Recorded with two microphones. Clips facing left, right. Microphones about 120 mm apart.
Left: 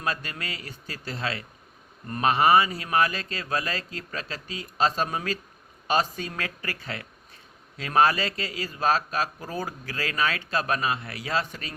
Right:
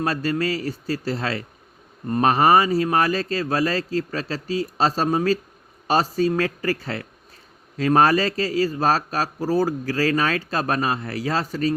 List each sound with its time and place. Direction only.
0.0 s speech: 35° right (ahead or behind)